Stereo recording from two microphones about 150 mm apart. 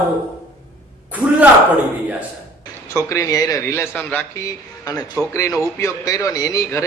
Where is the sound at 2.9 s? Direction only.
20° left (ahead or behind).